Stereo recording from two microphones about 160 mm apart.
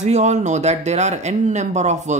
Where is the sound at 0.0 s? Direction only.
45° right (ahead or behind).